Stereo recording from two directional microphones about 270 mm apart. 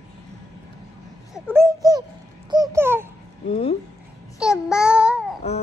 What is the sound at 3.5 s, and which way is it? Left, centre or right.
Speech, left.